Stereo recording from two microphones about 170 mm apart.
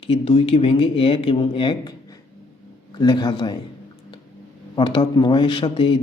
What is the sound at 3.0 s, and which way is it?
Speech, 25° left (ahead or behind).